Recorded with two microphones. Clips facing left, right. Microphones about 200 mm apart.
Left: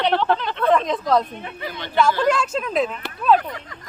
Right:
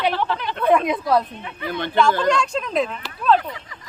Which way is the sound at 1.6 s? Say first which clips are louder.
Right 7 dB; 55° right (ahead or behind).